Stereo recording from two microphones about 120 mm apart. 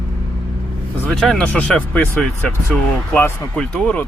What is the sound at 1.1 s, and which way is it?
Speech, 5° left (ahead or behind).